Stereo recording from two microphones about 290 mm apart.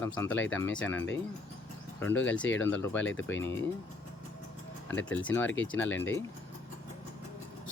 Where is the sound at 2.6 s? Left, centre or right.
Centre.